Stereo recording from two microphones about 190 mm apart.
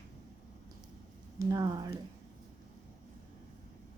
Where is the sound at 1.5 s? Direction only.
20° right (ahead or behind).